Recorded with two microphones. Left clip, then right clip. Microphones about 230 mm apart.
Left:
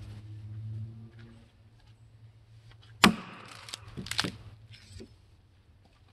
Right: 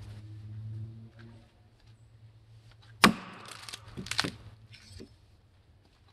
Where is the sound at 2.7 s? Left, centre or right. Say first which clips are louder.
Even; centre.